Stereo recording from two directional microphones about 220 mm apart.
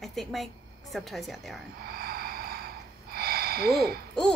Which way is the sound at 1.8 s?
45° right (ahead or behind).